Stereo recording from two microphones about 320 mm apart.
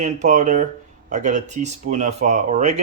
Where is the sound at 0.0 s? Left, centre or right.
Right.